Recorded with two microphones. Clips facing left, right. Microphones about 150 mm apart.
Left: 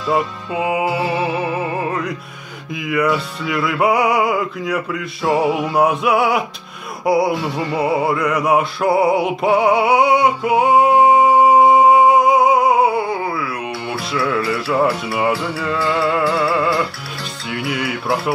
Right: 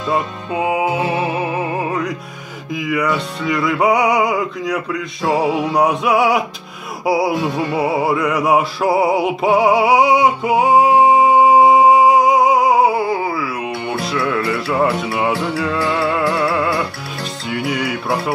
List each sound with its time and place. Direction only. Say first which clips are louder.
0.1 s music: left 1 dB; centre (ahead or behind)
1.0 s music: even; 15° right (ahead or behind)
1.9 s music: right 1 dB; centre (ahead or behind)
15.9 s music: left 3 dB; centre (ahead or behind)
17.6 s music: even; 5° left (ahead or behind)